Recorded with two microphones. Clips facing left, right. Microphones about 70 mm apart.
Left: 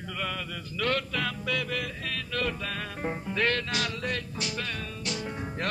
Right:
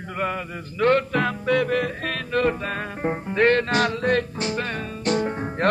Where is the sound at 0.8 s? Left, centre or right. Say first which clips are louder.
Right 10 dB; right.